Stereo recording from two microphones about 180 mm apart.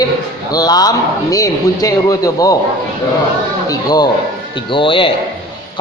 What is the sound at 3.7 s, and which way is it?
A man's voice, 20° left (ahead or behind).